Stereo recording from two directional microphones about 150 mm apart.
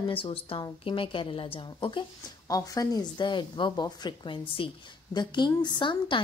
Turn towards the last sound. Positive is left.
turn(degrees=35)  # may be behind; listen again after turning